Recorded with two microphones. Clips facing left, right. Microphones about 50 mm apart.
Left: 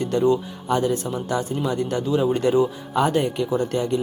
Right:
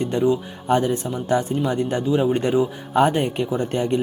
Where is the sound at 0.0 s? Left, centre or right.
Right.